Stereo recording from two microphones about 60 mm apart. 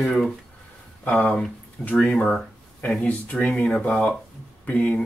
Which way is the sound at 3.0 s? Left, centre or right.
Left.